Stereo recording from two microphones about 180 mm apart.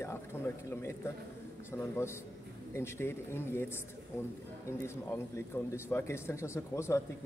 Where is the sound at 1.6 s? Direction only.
15° left (ahead or behind).